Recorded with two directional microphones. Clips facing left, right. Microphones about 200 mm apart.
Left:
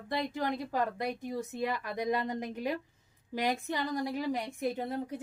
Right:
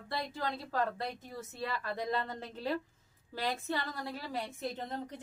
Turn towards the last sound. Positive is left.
turn(degrees=10)  # may be behind; listen again after turning